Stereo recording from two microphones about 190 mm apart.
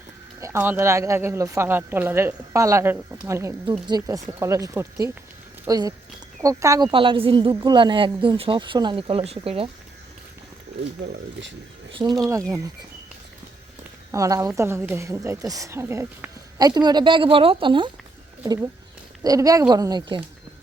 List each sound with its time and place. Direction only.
0.3 s a woman's voice: 15° right (ahead or behind); by 9.6 s 30° right (ahead or behind)
11.0 s speech: 65° right (ahead or behind)
12.5 s speech: 15° right (ahead or behind)
14.1 s a woman's voice: 15° right (ahead or behind)